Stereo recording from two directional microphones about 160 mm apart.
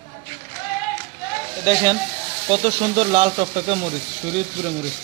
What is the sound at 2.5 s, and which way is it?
Speech, 35° right (ahead or behind).